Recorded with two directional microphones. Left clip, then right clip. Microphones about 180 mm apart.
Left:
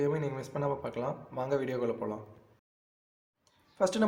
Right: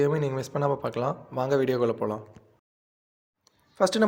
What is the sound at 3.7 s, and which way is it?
Speech, 35° right (ahead or behind).